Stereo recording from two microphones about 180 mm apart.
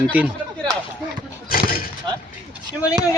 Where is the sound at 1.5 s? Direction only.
55° left (ahead or behind).